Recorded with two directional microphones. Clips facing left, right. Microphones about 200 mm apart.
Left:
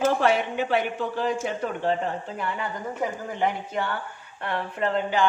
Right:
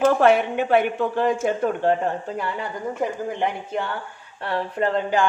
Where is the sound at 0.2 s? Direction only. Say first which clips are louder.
Right 5 dB; 55° right (ahead or behind).